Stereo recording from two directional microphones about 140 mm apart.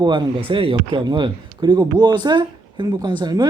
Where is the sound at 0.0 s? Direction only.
35° right (ahead or behind).